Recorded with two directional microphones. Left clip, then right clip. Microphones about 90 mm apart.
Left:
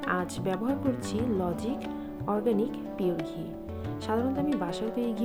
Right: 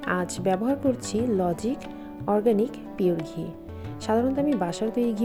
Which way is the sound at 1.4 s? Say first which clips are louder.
Right 5 dB; 45° right (ahead or behind).